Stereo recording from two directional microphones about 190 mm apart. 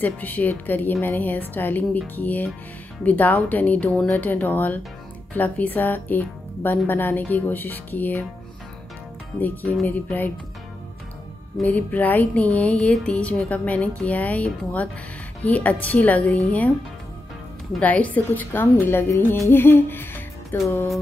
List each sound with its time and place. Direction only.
0.0 s music: 10° left (ahead or behind)
9.4 s music: 10° left (ahead or behind)
11.5 s music: 10° left (ahead or behind)
17.7 s music: 5° left (ahead or behind)